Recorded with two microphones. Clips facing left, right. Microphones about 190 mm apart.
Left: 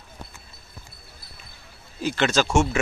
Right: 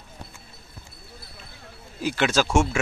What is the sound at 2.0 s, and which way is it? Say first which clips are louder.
Speech: even; 10° right (ahead or behind).